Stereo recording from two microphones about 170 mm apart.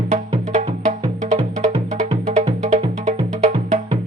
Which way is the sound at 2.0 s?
40° right (ahead or behind).